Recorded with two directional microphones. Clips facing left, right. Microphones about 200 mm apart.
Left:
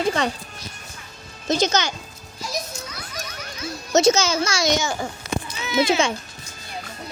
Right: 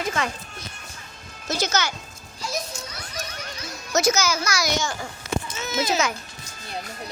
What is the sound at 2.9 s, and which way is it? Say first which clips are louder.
Music: even; 35° right (ahead or behind).